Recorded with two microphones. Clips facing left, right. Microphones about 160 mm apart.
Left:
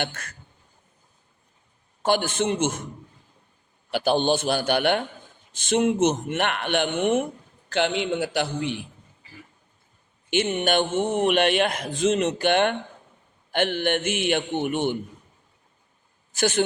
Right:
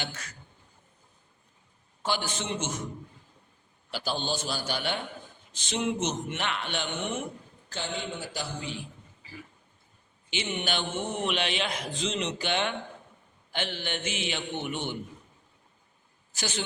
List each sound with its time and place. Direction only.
0.0 s speech: 55° left (ahead or behind)
2.0 s speech: 55° left (ahead or behind)
3.9 s speech: 60° left (ahead or behind)
5.5 s speech: 50° left (ahead or behind)
7.7 s a man's voice: 75° left (ahead or behind)
10.2 s speech: 50° left (ahead or behind)
16.3 s speech: 55° left (ahead or behind)